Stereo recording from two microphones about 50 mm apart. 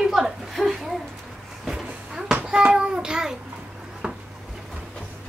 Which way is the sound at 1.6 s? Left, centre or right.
Centre.